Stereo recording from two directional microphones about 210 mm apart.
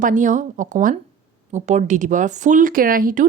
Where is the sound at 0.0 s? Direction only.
35° right (ahead or behind).